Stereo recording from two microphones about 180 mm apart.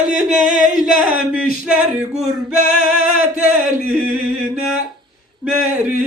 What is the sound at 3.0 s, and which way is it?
Music, 55° left (ahead or behind).